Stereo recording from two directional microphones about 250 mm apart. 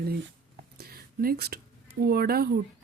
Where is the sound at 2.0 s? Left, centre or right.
Right.